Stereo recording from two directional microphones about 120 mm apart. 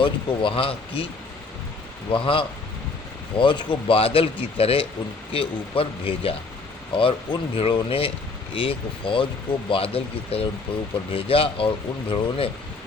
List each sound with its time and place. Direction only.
0.0 s speech: 45° left (ahead or behind)
2.0 s speech: 45° left (ahead or behind)